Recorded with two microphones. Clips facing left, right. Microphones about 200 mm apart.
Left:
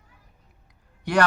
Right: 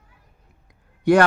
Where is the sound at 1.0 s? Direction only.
50° right (ahead or behind).